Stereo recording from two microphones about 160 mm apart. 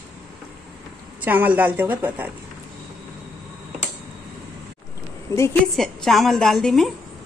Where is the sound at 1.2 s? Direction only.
10° right (ahead or behind).